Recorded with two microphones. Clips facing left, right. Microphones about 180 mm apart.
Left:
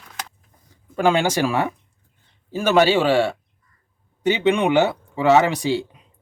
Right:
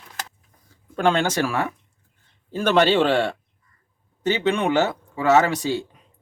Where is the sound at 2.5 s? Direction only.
5° left (ahead or behind).